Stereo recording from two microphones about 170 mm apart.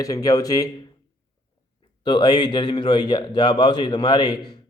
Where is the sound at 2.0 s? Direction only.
25° left (ahead or behind).